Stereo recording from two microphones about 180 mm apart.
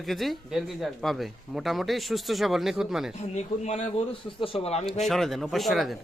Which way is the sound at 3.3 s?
40° left (ahead or behind).